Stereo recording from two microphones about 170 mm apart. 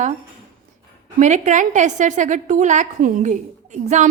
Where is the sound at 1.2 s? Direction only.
45° right (ahead or behind).